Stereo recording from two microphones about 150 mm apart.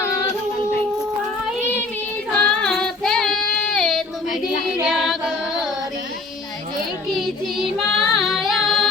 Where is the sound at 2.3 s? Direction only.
5° left (ahead or behind).